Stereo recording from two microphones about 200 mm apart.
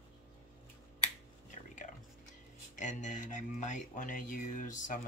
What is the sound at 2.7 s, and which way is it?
Music, 35° left (ahead or behind).